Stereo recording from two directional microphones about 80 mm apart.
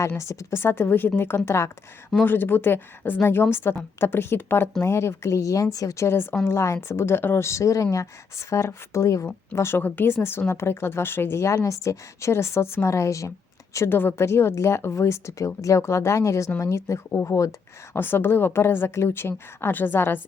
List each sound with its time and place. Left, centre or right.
0.2 s a woman's voice: left
9.6 s speech: left
13.7 s speech: left
17.9 s a woman's voice: left